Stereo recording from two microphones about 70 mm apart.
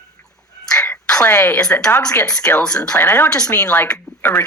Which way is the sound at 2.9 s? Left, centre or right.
Left.